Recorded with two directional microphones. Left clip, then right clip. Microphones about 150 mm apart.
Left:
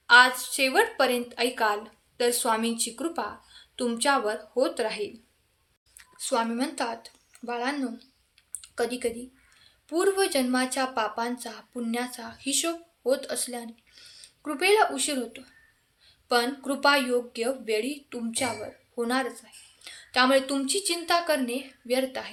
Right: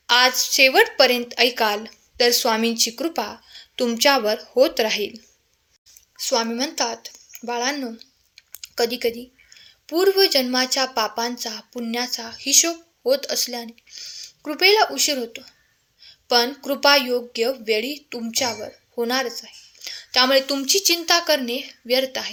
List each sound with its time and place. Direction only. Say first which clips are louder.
0.1 s a woman's voice: right 1 dB; 35° right (ahead or behind)
6.1 s a woman's voice: right 5 dB; 30° right (ahead or behind)